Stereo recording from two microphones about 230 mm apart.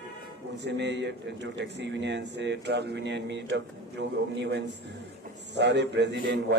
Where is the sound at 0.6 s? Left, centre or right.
Right.